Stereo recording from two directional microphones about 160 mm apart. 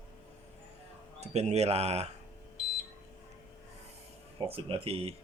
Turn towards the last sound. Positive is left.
turn(degrees=-35)  # may be behind; listen again after turning